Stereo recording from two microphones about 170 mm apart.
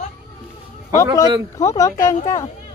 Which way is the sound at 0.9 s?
20° left (ahead or behind).